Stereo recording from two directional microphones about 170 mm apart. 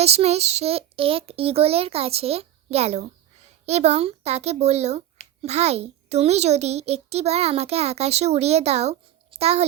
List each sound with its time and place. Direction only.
0.0 s a child's voice: 40° right (ahead or behind)